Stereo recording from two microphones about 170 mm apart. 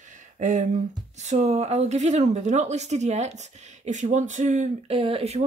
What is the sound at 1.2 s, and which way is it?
Speech, 40° right (ahead or behind).